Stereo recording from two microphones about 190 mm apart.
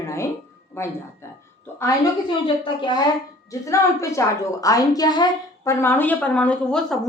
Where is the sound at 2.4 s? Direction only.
25° left (ahead or behind).